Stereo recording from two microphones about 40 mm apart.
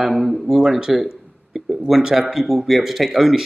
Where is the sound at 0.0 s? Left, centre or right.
Centre.